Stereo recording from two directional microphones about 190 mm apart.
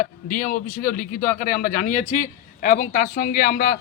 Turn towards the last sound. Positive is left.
turn(degrees=50)  # may be behind; listen again after turning